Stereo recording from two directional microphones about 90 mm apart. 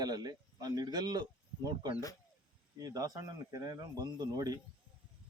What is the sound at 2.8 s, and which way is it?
A man's voice, 45° right (ahead or behind).